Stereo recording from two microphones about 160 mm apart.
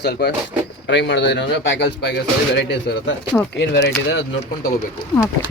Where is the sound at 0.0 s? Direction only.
90° left.